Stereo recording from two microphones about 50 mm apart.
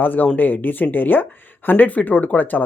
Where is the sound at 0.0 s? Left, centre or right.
Left.